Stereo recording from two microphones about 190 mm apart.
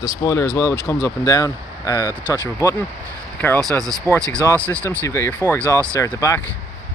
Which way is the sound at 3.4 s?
10° left (ahead or behind).